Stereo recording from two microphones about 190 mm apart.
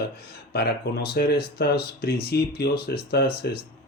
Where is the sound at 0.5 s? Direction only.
60° left (ahead or behind).